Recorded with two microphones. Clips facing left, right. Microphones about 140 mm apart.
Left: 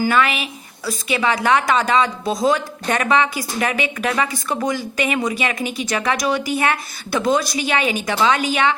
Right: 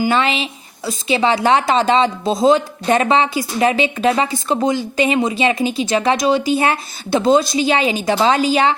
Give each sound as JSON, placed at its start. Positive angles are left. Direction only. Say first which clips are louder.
{"t": 0.0, "sound": "a woman's voice", "louder": "right 1 dB", "side_deg": -25}